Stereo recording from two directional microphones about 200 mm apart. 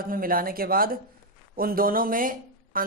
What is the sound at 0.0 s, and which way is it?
A woman's voice, 45° right (ahead or behind).